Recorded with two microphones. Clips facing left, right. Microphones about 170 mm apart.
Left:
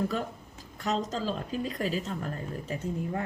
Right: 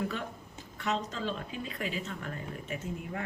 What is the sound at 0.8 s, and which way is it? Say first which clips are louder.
Speech: left 3 dB; 40° left (ahead or behind).